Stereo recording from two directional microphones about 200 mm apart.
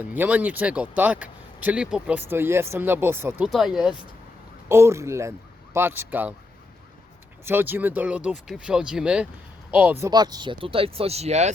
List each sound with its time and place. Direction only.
0.0 s speech: 10° right (ahead or behind)
4.7 s speech: 15° right (ahead or behind)
7.4 s speech: 10° right (ahead or behind); by 11.5 s 35° right (ahead or behind)